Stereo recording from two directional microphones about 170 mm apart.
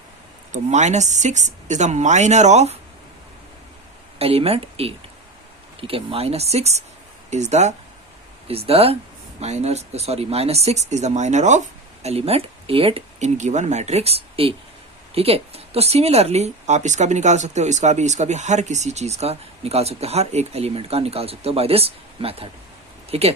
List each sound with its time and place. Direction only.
0.5 s speech: 45° right (ahead or behind)
4.2 s speech: 35° right (ahead or behind)